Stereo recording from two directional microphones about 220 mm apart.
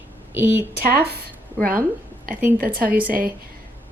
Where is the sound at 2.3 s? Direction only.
40° right (ahead or behind).